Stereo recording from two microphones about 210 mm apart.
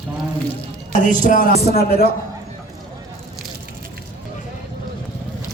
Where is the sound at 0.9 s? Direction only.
40° left (ahead or behind).